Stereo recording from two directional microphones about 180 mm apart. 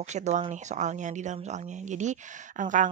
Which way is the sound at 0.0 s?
40° right (ahead or behind).